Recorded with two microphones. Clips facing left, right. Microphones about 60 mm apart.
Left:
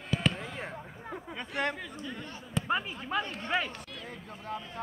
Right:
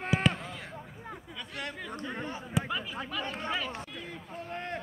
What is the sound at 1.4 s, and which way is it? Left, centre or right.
Speech, left.